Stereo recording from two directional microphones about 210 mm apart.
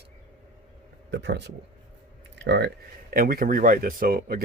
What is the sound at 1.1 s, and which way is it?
Speech, 55° right (ahead or behind).